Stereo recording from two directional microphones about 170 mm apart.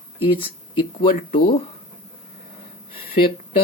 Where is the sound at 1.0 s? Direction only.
50° left (ahead or behind).